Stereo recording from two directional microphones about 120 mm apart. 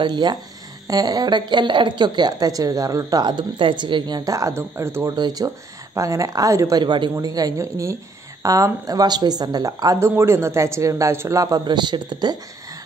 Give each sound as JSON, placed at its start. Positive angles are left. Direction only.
{"t": 0.0, "sound": "a woman's voice", "side_deg": -40}
{"t": 5.1, "sound": "a woman's voice", "side_deg": -35}
{"t": 6.8, "sound": "speech", "side_deg": -40}